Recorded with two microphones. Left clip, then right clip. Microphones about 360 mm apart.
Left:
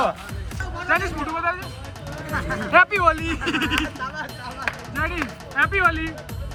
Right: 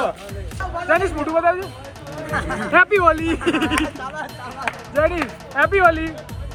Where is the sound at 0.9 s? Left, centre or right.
Centre.